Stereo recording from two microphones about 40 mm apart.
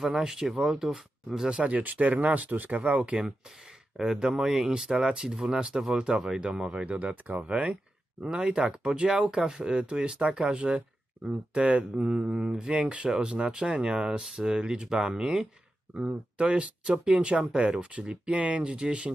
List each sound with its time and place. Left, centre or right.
0.2 s speech: centre
1.6 s speech: right
4.0 s speech: centre
7.0 s speech: right
8.2 s speech: right
10.5 s speech: right
12.0 s speech: centre
16.1 s speech: right